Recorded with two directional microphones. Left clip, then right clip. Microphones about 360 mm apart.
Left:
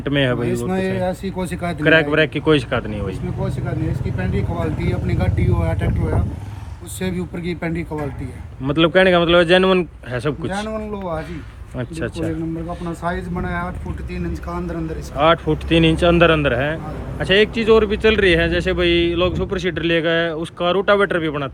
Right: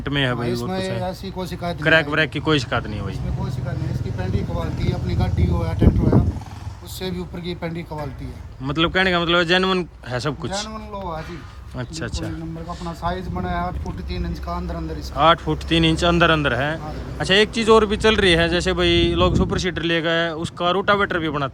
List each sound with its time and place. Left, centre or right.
0.0 s speech: centre
0.9 s speech: centre
1.8 s speech: centre
4.2 s speech: centre
7.0 s speech: centre
8.6 s speech: centre
15.1 s speech: centre